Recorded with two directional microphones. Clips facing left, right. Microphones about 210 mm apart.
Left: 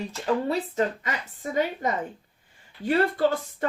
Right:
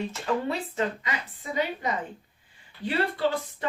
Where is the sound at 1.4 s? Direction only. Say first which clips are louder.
Left 5 dB; 45° left (ahead or behind).